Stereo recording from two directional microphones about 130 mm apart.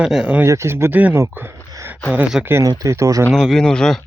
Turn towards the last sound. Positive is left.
turn(degrees=5)  # may be behind; listen again after turning